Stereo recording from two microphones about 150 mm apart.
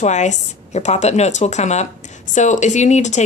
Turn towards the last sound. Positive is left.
turn(degrees=50)  # may be behind; listen again after turning